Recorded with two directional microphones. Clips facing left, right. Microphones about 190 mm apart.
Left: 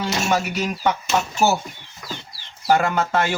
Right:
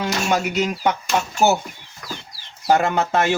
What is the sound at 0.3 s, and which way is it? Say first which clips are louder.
Speech: right 3 dB; 20° right (ahead or behind).